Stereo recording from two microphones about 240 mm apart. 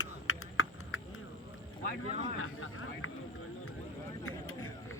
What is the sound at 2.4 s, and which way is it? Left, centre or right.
Vehicle, left.